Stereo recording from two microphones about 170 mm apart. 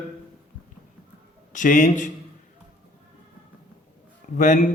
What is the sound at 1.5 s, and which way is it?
Mantra, 50° left (ahead or behind).